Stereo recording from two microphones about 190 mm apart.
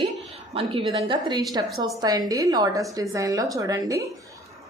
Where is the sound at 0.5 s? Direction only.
30° right (ahead or behind).